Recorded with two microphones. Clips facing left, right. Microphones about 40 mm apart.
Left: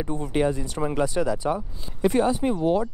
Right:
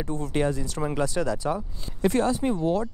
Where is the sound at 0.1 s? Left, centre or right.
Centre.